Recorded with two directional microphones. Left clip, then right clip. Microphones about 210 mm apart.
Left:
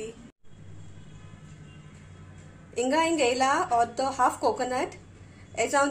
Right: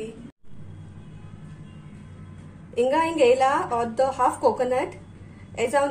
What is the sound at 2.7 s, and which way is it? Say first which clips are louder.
A woman's voice: right 4 dB; 15° left (ahead or behind).